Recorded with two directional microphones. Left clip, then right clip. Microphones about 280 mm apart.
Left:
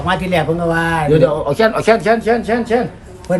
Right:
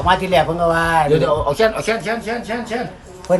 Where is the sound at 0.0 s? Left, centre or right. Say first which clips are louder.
Right 2 dB; centre.